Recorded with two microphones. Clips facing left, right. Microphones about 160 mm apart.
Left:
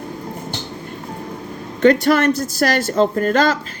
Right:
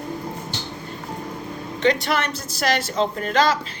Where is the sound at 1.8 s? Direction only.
50° left (ahead or behind).